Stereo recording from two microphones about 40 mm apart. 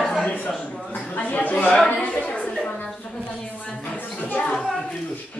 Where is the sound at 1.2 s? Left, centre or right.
Left.